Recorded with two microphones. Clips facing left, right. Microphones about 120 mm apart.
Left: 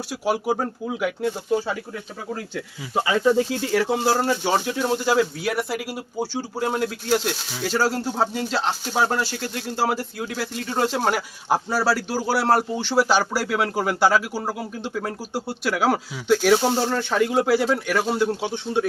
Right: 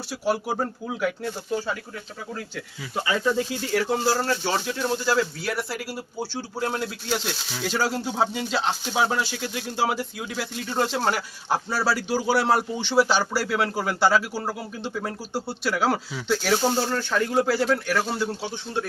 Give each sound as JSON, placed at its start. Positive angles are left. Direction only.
{"t": 0.1, "sound": "a man's voice", "side_deg": 10}
{"t": 2.9, "sound": "a man's voice", "side_deg": 30}
{"t": 16.7, "sound": "a man's voice", "side_deg": 20}